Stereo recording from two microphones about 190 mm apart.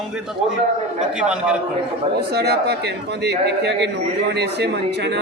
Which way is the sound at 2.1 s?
60° right (ahead or behind).